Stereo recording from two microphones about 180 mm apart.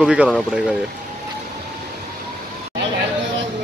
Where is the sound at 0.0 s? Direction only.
5° right (ahead or behind).